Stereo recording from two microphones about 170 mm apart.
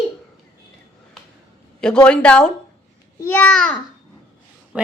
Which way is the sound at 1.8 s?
5° left (ahead or behind).